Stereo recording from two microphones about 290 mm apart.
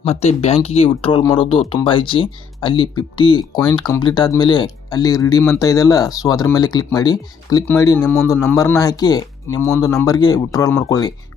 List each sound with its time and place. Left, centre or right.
0.0 s speech: left